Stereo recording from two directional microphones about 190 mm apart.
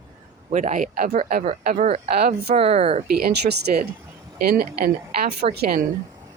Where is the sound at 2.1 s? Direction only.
55° right (ahead or behind).